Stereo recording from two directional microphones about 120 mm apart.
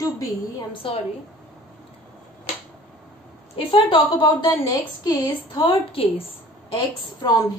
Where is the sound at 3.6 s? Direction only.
50° left (ahead or behind); by 5.7 s 35° left (ahead or behind).